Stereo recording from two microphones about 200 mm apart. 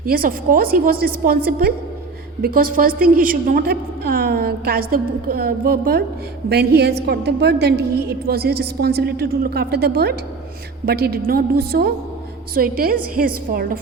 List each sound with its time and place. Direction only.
0.0 s a woman's voice: 45° right (ahead or behind)